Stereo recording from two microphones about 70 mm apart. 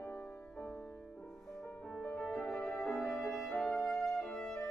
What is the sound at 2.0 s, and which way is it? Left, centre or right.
Music, centre.